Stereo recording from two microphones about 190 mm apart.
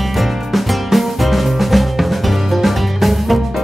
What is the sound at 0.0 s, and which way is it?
Music, centre (ahead or behind).